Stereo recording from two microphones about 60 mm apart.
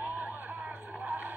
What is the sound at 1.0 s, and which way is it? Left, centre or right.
Vehicle, right.